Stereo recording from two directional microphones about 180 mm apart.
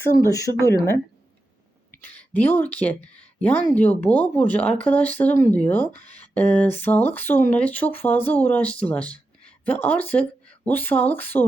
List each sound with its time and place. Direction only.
0.2 s speech: 15° left (ahead or behind)
1.9 s speech: 10° left (ahead or behind)